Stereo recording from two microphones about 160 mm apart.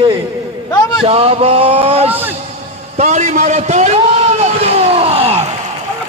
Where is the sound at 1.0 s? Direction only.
35° right (ahead or behind).